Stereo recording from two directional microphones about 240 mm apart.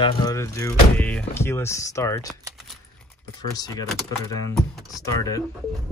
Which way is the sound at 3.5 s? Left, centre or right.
Centre.